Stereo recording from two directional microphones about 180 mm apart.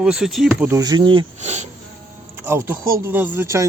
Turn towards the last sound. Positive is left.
turn(degrees=-15)  # may be behind; listen again after turning